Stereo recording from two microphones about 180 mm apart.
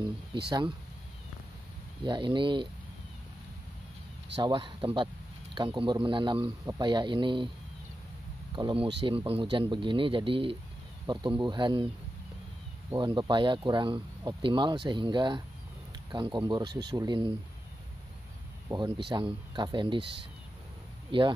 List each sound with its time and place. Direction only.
0.5 s speech: 25° right (ahead or behind)
2.0 s speech: 25° right (ahead or behind)
4.4 s speech: 25° right (ahead or behind)
8.5 s speech: 25° right (ahead or behind)
12.9 s speech: 20° right (ahead or behind)
18.7 s speech: 25° right (ahead or behind)
21.1 s speech: 30° right (ahead or behind)